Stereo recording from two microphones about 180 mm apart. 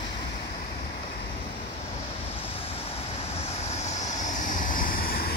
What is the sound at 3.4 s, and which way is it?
Vehicle, 40° left (ahead or behind).